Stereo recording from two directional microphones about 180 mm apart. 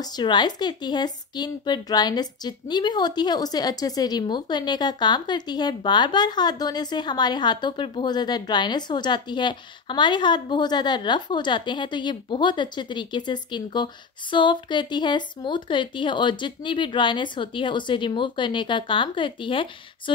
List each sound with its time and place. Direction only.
0.0 s a woman's voice: 25° left (ahead or behind)